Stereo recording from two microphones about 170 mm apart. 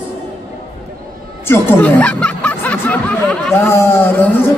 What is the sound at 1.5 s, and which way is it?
Speech, 15° left (ahead or behind).